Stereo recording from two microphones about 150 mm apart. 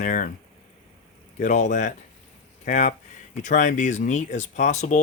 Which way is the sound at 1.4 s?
55° left (ahead or behind).